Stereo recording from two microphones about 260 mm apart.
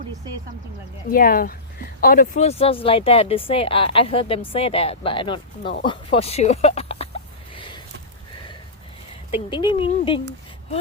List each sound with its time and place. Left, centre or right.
1.1 s speech: left
7.5 s a sound: centre
9.3 s speech: centre